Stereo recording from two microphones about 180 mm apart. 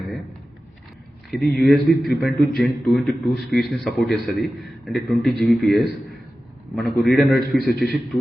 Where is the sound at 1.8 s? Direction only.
60° left (ahead or behind).